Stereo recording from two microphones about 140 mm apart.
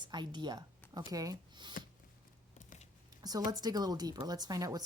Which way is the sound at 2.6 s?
60° left (ahead or behind).